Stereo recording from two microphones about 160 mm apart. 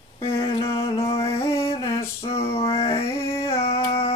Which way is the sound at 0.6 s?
35° left (ahead or behind).